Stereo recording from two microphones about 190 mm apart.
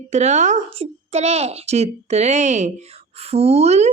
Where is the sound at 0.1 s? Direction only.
35° right (ahead or behind).